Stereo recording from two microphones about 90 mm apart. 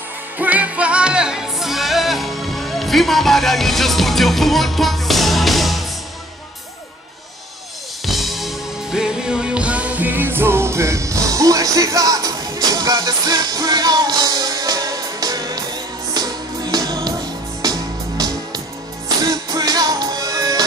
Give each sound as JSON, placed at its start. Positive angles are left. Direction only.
{"t": 0.4, "sound": "music", "side_deg": -15}
{"t": 8.0, "sound": "music", "side_deg": 0}